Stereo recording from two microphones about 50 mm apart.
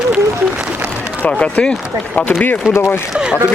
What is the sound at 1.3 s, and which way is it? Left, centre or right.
Speech, left.